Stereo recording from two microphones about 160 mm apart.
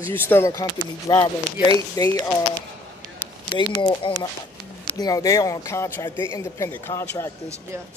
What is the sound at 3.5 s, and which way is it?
A man's voice, 30° left (ahead or behind).